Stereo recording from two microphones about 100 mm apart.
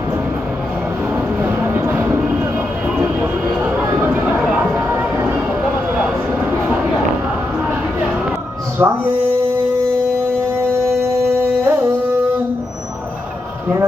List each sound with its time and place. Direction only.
1.6 s a sound: 25° right (ahead or behind)
8.8 s music: 10° right (ahead or behind)
11.6 s music: 15° right (ahead or behind)